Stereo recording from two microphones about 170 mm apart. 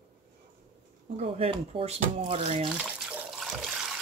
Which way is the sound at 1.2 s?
35° right (ahead or behind).